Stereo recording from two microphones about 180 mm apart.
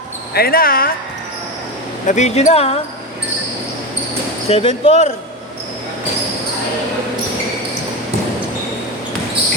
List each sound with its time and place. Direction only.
0.3 s speech: 55° left (ahead or behind)
2.0 s speech: 40° left (ahead or behind)
4.4 s speech: 35° left (ahead or behind)